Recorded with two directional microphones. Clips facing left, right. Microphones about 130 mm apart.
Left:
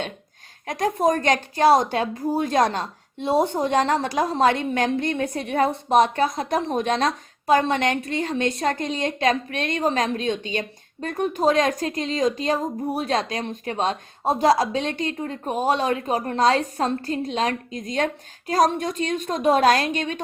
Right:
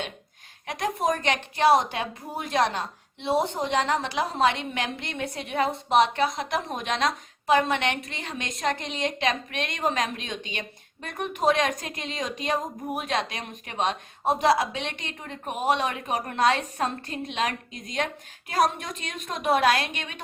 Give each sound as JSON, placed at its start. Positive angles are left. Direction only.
{"t": 0.7, "sound": "a woman's voice", "side_deg": 40}